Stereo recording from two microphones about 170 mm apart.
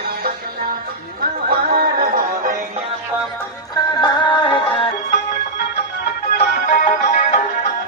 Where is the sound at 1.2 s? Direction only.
65° right (ahead or behind).